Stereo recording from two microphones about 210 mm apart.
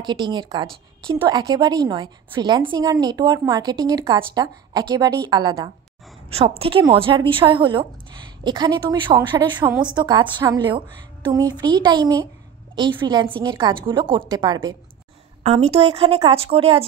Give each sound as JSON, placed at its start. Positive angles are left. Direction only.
{"t": 0.0, "sound": "a woman's voice", "side_deg": -20}